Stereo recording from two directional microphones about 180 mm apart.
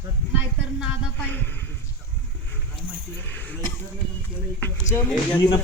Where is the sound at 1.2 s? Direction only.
10° left (ahead or behind).